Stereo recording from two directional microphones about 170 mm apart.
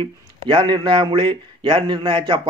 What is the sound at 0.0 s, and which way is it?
Speech, 30° right (ahead or behind).